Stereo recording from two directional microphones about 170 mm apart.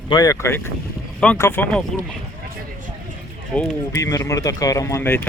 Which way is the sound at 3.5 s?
5° left (ahead or behind).